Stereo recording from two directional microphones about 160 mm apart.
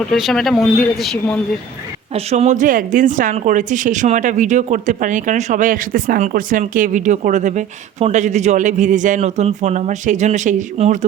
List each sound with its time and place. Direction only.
0.1 s speech: centre (ahead or behind)
2.1 s a woman's voice: 45° right (ahead or behind)